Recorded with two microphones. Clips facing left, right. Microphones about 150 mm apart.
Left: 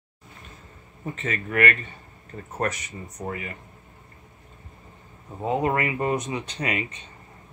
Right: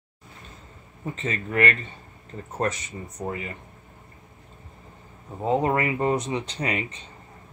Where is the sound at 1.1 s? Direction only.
25° right (ahead or behind).